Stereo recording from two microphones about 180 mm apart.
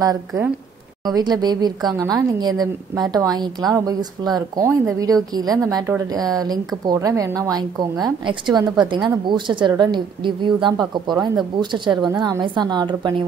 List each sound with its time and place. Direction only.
0.0 s a woman's voice: 20° right (ahead or behind)